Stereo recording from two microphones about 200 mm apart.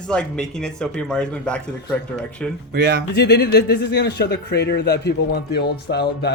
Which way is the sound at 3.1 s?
55° left (ahead or behind).